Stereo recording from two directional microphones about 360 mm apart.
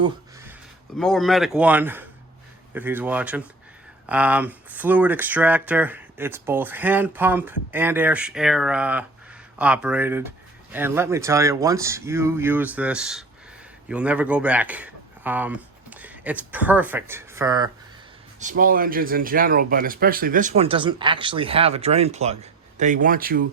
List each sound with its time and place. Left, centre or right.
0.9 s speech: centre
18.3 s speech: right